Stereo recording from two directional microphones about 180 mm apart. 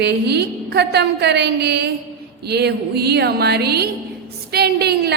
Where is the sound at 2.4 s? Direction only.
65° right (ahead or behind).